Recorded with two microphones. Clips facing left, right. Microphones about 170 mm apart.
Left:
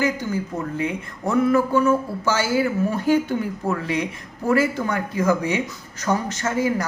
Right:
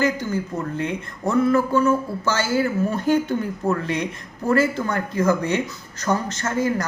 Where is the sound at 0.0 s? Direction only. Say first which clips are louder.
Right 1 dB; 10° left (ahead or behind).